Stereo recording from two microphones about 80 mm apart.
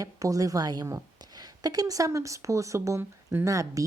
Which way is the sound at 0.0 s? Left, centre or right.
Right.